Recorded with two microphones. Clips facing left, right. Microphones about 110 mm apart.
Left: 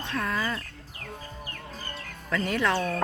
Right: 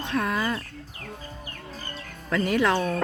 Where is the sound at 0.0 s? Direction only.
15° right (ahead or behind).